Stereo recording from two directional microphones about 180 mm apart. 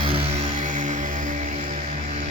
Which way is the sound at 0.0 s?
35° right (ahead or behind).